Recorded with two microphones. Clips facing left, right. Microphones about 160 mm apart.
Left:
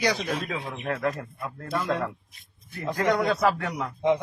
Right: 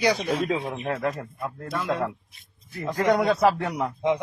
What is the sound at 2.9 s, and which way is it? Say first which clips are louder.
Speech: right 3 dB; 10° right (ahead or behind).